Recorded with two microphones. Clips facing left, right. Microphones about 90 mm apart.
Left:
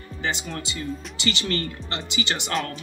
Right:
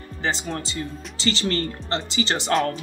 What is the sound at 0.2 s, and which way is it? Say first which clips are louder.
Speech: right 3 dB; 35° right (ahead or behind).